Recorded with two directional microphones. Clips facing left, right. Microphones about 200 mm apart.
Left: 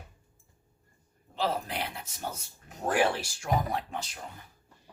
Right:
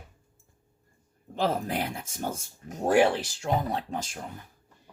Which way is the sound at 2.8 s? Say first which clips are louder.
Right 5 dB; 25° right (ahead or behind).